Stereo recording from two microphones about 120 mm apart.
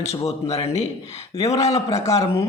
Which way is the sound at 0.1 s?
65° left (ahead or behind).